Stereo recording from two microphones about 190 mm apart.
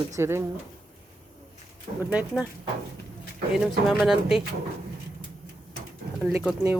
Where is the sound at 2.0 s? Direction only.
5° right (ahead or behind).